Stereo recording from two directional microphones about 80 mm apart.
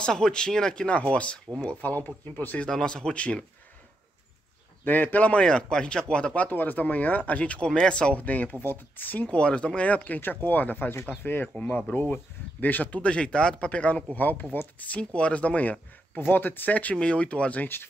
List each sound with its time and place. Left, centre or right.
0.0 s speech: centre
2.7 s speech: centre
4.8 s speech: left
11.4 s speech: centre
11.7 s speech: left